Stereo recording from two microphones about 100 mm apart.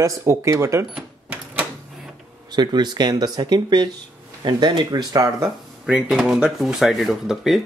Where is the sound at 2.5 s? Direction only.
45° right (ahead or behind).